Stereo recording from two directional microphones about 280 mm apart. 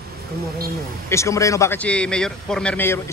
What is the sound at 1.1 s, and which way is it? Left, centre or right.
A man's voice, centre.